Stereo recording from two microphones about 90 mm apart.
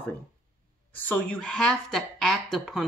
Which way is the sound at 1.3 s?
5° left (ahead or behind).